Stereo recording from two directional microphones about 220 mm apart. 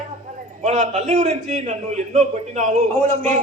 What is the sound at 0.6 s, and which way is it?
A man's voice, 30° right (ahead or behind).